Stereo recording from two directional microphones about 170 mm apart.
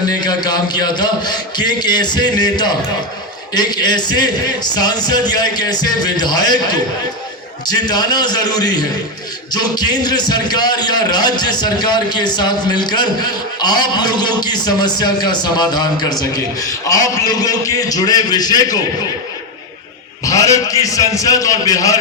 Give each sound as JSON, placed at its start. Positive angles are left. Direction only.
{"t": 0.1, "sound": "a man's voice", "side_deg": 25}
{"t": 20.2, "sound": "a man's voice", "side_deg": 20}